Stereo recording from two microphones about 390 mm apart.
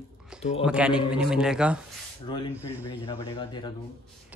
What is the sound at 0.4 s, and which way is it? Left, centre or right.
Speech, centre.